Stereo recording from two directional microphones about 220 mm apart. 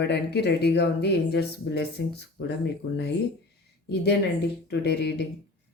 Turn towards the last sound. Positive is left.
turn(degrees=50)  # may be behind; listen again after turning